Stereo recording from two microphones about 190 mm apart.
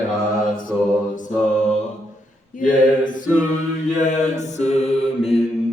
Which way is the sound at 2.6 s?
45° left (ahead or behind).